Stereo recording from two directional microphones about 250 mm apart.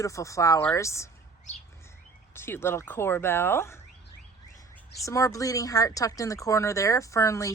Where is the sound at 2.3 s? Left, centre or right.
Centre.